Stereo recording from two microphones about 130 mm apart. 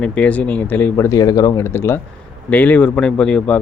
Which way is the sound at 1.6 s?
20° left (ahead or behind).